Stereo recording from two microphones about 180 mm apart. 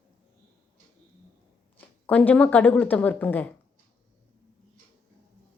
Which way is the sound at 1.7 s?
10° left (ahead or behind).